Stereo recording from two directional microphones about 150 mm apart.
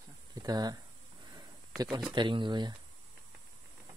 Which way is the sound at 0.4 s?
25° right (ahead or behind).